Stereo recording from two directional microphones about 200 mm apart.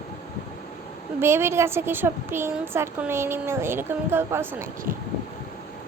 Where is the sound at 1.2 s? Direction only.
10° right (ahead or behind).